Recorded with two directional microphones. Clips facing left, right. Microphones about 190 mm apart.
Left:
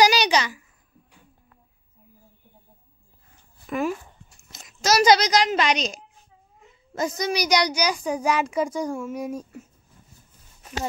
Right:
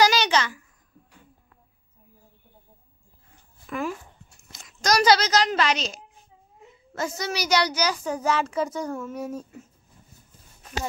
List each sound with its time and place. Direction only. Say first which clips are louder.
0.0 s a sound: left 1 dB; 15° left (ahead or behind)
3.6 s a child's voice: left 4 dB; 20° left (ahead or behind)
7.0 s a child's voice: left 4 dB; 15° left (ahead or behind)